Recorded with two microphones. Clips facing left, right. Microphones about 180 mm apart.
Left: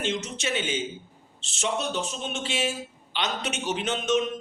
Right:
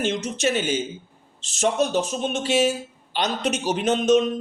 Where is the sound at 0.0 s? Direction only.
45° right (ahead or behind).